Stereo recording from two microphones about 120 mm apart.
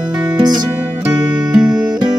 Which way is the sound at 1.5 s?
5° right (ahead or behind).